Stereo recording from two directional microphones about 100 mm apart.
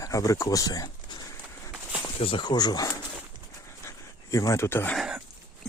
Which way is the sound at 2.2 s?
60° left (ahead or behind).